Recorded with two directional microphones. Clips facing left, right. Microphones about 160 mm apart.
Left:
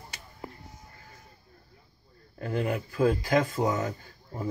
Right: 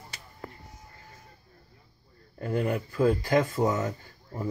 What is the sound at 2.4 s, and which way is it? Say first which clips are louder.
Speech: right 1 dB; centre (ahead or behind).